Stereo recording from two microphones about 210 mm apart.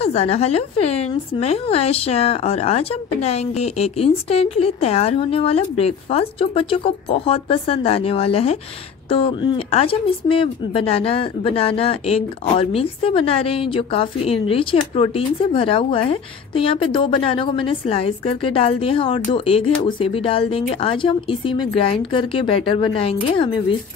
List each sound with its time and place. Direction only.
0.0 s speech: 30° left (ahead or behind)